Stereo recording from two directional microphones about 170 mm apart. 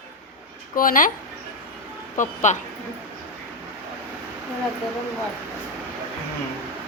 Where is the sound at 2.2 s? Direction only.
50° left (ahead or behind).